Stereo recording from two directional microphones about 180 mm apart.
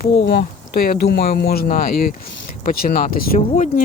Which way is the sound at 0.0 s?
65° left (ahead or behind).